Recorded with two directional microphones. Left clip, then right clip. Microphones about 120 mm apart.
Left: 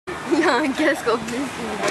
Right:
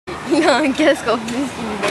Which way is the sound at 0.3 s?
25° right (ahead or behind).